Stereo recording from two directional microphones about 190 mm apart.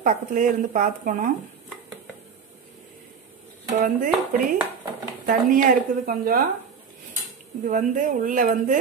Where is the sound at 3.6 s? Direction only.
45° right (ahead or behind).